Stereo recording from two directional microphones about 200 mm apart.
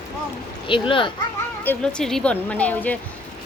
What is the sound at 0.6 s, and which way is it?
Speech, 25° left (ahead or behind).